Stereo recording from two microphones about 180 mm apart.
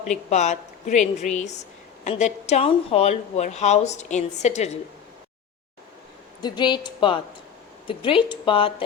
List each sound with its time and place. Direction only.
0.1 s a woman's voice: 40° left (ahead or behind)
6.4 s speech: 25° left (ahead or behind)